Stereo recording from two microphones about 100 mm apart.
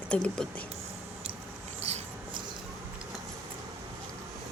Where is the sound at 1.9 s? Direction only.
90° right.